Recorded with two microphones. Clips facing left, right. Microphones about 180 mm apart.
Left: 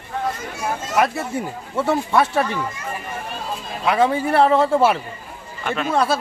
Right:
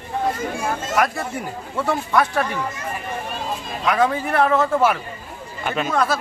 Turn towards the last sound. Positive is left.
turn(degrees=30)  # may be behind; listen again after turning